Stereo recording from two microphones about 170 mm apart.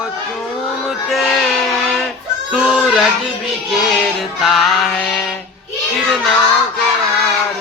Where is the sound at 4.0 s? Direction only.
Centre (ahead or behind).